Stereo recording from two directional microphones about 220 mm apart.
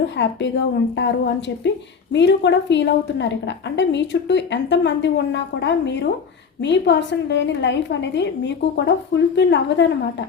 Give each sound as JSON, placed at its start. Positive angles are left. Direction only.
{"t": 0.2, "sound": "a woman's voice", "side_deg": 55}